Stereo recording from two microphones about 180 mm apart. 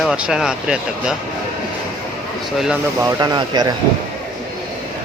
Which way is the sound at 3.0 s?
20° right (ahead or behind).